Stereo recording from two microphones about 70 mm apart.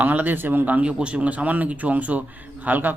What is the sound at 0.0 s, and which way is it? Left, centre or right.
Speech, right.